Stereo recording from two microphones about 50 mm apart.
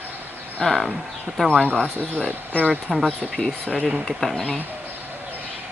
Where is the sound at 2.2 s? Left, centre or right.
Left.